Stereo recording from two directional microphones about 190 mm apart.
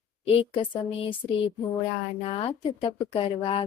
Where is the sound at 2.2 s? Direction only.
30° left (ahead or behind).